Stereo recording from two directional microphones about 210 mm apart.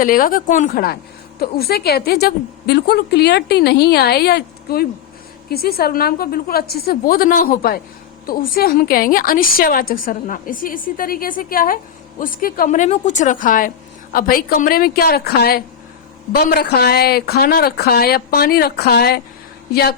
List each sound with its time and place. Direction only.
0.0 s a woman's voice: 40° left (ahead or behind)